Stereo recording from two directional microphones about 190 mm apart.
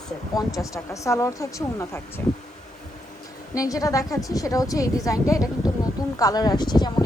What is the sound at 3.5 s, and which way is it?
A woman's voice, 20° left (ahead or behind).